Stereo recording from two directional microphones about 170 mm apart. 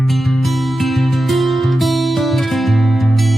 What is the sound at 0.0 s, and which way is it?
Music, centre (ahead or behind).